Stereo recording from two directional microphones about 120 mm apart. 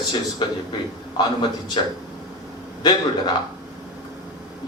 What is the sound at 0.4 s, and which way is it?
A man's voice, 40° left (ahead or behind).